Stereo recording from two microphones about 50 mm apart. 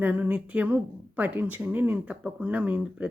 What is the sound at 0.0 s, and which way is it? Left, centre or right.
Speech, right.